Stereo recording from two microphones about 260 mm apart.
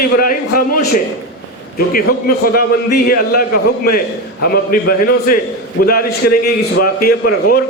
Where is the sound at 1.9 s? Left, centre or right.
Left.